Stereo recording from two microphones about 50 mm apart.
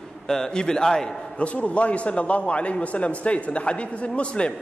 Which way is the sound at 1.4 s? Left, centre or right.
Left.